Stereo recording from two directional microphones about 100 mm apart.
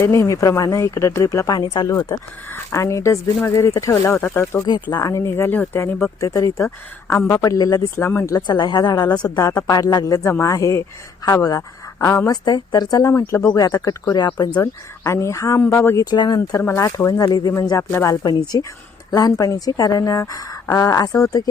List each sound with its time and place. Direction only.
0.0 s a woman's voice: 30° left (ahead or behind)
4.6 s speech: 40° left (ahead or behind); by 5.9 s 20° left (ahead or behind)
6.1 s a woman's voice: 30° left (ahead or behind)
8.0 s speech: 25° left (ahead or behind)
8.4 s a woman's voice: 45° left (ahead or behind); by 12.3 s 30° left (ahead or behind)
12.3 s a woman's voice: 40° left (ahead or behind)
13.1 s a woman's voice: 30° left (ahead or behind)
14.6 s speech: 25° left (ahead or behind)
16.0 s speech: 45° left (ahead or behind)
16.4 s speech: 30° left (ahead or behind)
17.2 s a woman's voice: 40° left (ahead or behind)